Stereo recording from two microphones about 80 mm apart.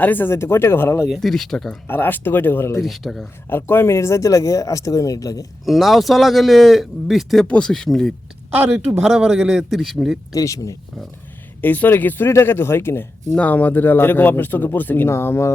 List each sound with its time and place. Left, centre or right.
0.0 s speech: left
1.2 s a man's voice: centre
1.9 s speech: left
2.8 s a man's voice: centre
3.5 s speech: left
5.6 s a man's voice: centre
7.4 s speech: centre
9.0 s a man's voice: centre
10.3 s speech: left
11.6 s speech: left